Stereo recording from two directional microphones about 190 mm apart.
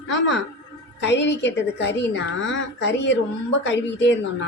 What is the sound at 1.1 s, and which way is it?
A woman's voice, 70° left (ahead or behind).